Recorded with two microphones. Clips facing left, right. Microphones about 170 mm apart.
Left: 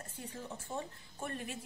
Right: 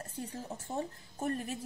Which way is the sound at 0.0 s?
40° right (ahead or behind).